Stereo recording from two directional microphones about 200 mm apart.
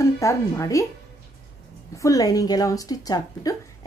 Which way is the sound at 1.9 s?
15° left (ahead or behind).